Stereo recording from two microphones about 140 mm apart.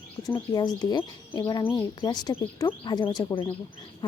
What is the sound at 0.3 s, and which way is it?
Speech, 30° left (ahead or behind).